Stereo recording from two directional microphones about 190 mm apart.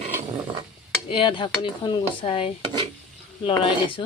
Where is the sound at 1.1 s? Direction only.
25° left (ahead or behind).